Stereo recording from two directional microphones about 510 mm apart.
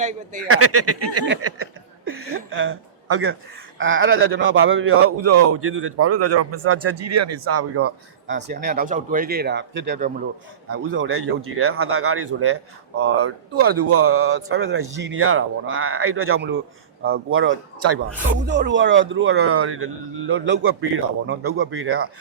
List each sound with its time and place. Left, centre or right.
0.4 s speech: right
2.0 s a sound: right
3.8 s speech: right